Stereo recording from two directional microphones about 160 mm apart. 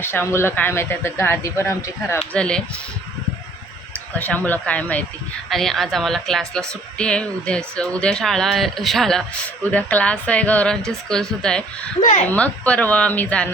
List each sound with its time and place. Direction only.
0.0 s speech: 15° left (ahead or behind)
4.1 s speech: 10° left (ahead or behind)
11.9 s a woman's voice: 45° left (ahead or behind)
12.3 s speech: 10° left (ahead or behind)